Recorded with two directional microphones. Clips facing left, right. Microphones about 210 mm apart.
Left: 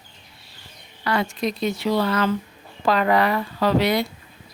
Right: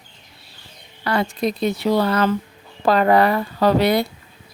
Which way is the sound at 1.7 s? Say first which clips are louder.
Right 3 dB; 60° right (ahead or behind).